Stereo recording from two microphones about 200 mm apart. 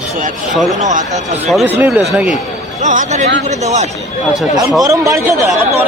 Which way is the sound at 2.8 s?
35° right (ahead or behind).